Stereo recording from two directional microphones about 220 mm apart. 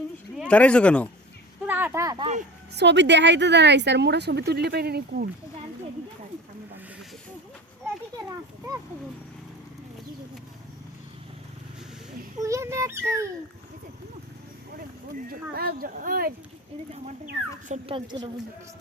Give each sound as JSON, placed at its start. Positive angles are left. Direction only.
{"t": 0.3, "sound": "speech", "side_deg": 5}
{"t": 1.6, "sound": "a sound", "side_deg": -10}
{"t": 2.7, "sound": "speech", "side_deg": -55}
{"t": 12.4, "sound": "speech", "side_deg": -15}
{"t": 15.1, "sound": "speech", "side_deg": -40}
{"t": 17.9, "sound": "a woman's voice", "side_deg": -20}